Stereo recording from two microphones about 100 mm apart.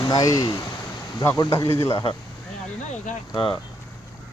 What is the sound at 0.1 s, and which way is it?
Speech, 35° left (ahead or behind).